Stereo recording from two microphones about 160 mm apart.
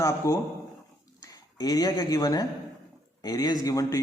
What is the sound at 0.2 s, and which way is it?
A man's voice, 20° left (ahead or behind).